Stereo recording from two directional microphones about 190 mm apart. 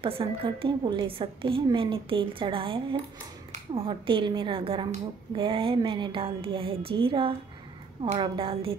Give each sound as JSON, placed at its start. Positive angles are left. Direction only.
{"t": 0.0, "sound": "a woman's voice", "side_deg": -30}